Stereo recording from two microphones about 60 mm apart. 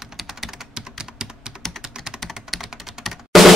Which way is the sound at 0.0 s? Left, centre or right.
Centre.